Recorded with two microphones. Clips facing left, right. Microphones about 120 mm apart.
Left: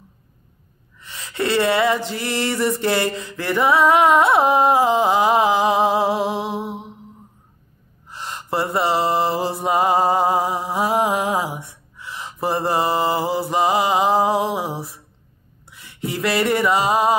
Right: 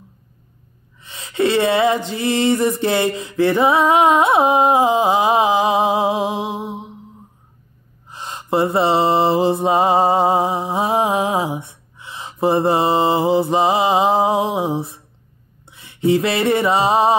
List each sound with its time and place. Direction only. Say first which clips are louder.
1.0 s mantra: right 5 dB; 20° right (ahead or behind)
2.8 s a sound: right 2 dB; 20° right (ahead or behind)
8.1 s mantra: right 5 dB; 15° right (ahead or behind)
15.6 s music: right 11 dB; 25° right (ahead or behind)